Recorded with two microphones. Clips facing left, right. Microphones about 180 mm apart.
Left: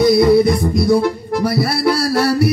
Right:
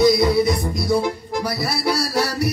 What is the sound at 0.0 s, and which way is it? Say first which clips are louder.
Music: left 5 dB; 55° left (ahead or behind).